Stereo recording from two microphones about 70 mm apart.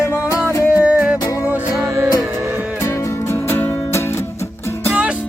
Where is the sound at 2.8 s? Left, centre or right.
Left.